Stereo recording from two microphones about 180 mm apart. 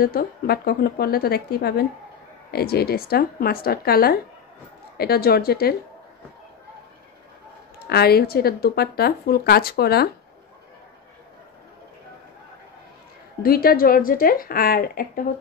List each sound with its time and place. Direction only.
0.0 s speech: 55° left (ahead or behind)
7.9 s speech: 60° left (ahead or behind)
13.4 s speech: 55° left (ahead or behind)